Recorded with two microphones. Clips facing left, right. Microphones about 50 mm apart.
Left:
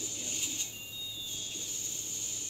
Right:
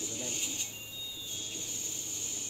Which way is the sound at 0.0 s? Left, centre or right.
Right.